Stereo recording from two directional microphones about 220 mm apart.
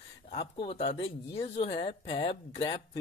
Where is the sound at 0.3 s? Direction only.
25° left (ahead or behind).